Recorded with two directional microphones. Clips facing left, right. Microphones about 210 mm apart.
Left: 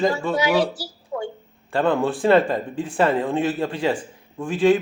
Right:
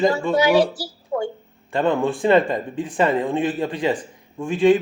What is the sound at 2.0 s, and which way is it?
Speech, centre (ahead or behind).